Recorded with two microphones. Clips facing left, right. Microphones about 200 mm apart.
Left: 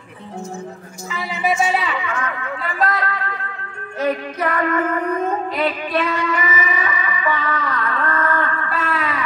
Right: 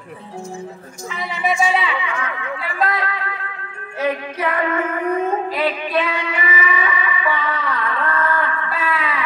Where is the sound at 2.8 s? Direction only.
45° left (ahead or behind).